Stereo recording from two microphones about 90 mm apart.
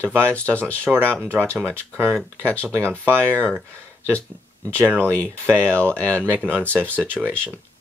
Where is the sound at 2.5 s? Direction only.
10° left (ahead or behind).